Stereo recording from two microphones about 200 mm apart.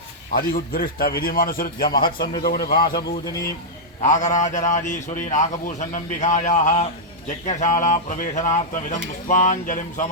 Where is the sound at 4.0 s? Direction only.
35° left (ahead or behind).